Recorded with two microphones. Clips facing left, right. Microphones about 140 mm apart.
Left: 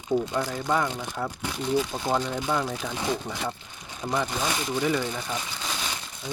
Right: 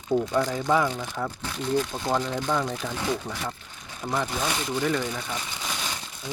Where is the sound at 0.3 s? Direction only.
5° left (ahead or behind).